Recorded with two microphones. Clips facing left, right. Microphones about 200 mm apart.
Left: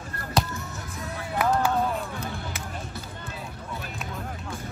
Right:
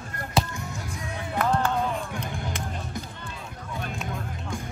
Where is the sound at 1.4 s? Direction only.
10° left (ahead or behind).